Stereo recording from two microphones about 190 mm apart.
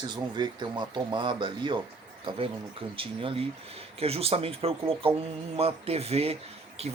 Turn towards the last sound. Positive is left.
turn(degrees=-30)  # may be behind; listen again after turning